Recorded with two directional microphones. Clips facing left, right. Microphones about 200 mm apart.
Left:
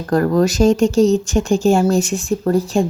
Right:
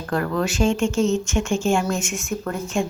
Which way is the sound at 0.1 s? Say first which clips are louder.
Left 8 dB; 40° left (ahead or behind).